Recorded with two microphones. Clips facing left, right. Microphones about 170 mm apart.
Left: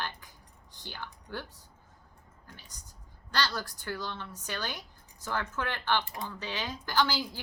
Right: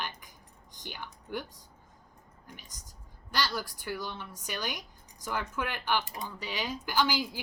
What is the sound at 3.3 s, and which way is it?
Speech, 10° right (ahead or behind).